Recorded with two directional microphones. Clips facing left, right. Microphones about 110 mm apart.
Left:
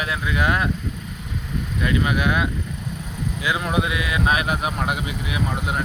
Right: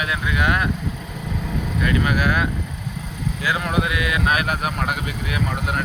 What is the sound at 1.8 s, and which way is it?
Speech, 20° left (ahead or behind).